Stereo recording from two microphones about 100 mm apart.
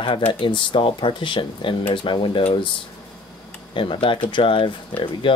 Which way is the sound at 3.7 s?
60° left (ahead or behind).